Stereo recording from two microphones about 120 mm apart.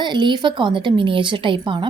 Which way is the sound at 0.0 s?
40° right (ahead or behind).